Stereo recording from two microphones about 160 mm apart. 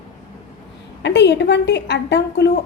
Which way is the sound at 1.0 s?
90° left.